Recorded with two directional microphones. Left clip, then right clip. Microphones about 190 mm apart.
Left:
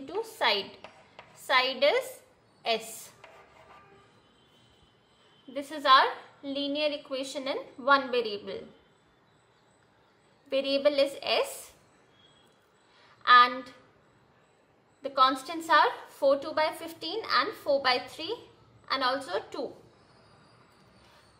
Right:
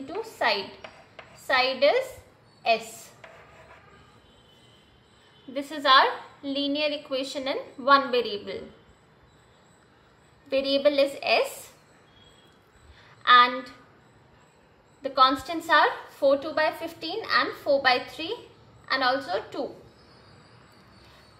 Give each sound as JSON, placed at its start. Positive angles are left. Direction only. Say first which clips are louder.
{"t": 0.0, "sound": "a sound", "louder": "right 2 dB", "side_deg": 30}
{"t": 1.5, "sound": "a woman's voice", "louder": "right 3 dB", "side_deg": 25}
{"t": 5.5, "sound": "a woman's voice", "louder": "right 2 dB", "side_deg": 5}
{"t": 10.5, "sound": "a woman's voice", "louder": "right 3 dB", "side_deg": 15}
{"t": 13.2, "sound": "a woman's voice", "louder": "right 2 dB", "side_deg": 15}
{"t": 15.0, "sound": "a woman's voice", "louder": "right 4 dB", "side_deg": 15}